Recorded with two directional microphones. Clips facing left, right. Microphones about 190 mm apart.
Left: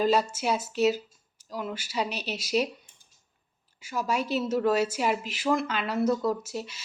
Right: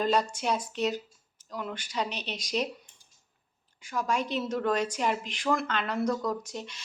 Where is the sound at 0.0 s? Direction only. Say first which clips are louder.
Left 3 dB; 5° left (ahead or behind).